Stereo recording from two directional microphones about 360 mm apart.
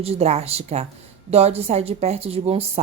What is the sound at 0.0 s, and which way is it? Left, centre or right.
A woman's voice, centre.